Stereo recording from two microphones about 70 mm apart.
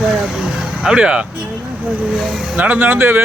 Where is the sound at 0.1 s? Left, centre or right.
Centre.